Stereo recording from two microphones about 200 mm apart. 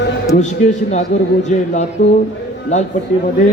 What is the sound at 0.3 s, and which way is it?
Speech, 35° left (ahead or behind).